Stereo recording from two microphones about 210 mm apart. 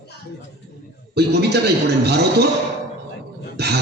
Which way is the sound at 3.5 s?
50° right (ahead or behind).